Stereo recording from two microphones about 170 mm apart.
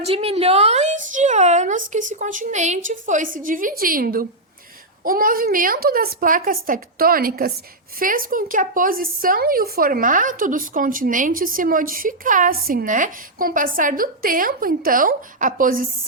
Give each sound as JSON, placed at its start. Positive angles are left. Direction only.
{"t": 0.0, "sound": "a woman's voice", "side_deg": -35}